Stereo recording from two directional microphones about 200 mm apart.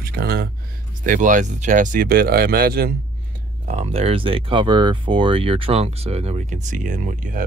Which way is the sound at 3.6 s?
35° right (ahead or behind).